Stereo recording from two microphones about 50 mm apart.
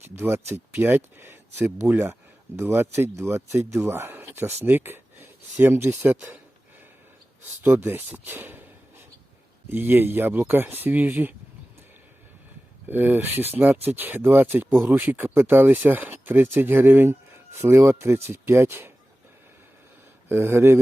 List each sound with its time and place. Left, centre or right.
0.0 s speech: right
2.6 s speech: right
3.8 s speech: right
6.1 s speech: right
7.4 s speech: right
9.6 s speech: right
12.9 s speech: right
20.2 s speech: right